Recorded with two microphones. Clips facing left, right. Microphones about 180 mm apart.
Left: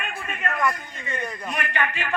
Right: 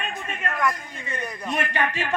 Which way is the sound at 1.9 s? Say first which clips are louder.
Right 2 dB; 35° right (ahead or behind).